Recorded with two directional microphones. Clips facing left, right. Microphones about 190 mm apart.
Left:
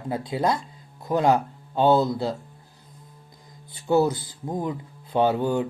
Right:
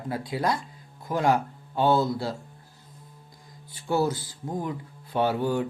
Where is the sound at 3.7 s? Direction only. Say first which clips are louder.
Left 5 dB; 20° left (ahead or behind).